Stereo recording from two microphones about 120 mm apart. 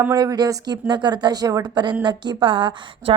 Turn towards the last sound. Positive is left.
turn(degrees=-45)  # may be behind; listen again after turning